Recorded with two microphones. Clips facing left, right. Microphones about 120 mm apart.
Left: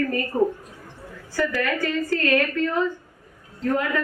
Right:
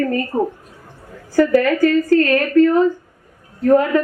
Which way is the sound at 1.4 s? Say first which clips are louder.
Right 10 dB; 40° right (ahead or behind).